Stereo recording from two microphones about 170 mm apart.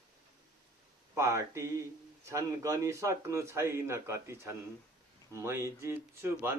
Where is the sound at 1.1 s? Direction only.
15° right (ahead or behind).